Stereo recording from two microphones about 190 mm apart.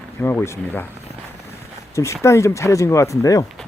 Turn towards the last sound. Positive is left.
turn(degrees=15)  # may be behind; listen again after turning